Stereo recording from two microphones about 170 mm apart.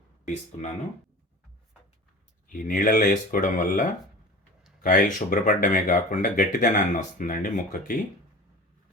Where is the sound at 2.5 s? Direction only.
50° left (ahead or behind).